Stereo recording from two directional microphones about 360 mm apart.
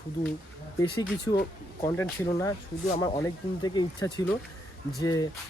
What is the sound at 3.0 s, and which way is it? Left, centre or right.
Speech, centre.